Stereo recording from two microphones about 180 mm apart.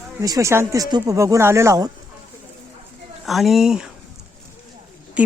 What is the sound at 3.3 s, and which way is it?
Speech, centre (ahead or behind).